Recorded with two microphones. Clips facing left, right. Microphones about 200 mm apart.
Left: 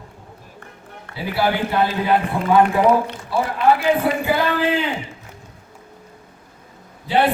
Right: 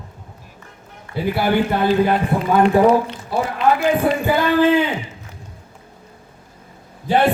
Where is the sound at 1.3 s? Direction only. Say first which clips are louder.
Right 2 dB; 50° right (ahead or behind).